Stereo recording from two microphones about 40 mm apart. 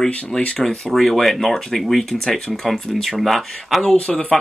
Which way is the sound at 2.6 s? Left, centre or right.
Centre.